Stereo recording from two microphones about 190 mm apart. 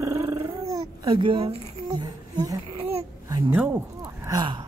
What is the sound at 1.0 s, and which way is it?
Speech, 25° right (ahead or behind).